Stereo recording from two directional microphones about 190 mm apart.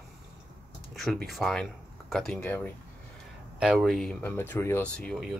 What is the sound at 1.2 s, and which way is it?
Speech, centre (ahead or behind).